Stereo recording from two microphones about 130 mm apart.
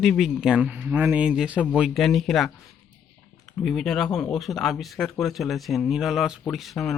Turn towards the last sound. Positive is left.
turn(degrees=0)  # may be behind; listen again after turning